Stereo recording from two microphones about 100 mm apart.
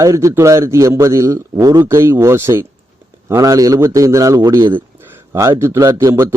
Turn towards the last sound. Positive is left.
turn(degrees=-30)  # may be behind; listen again after turning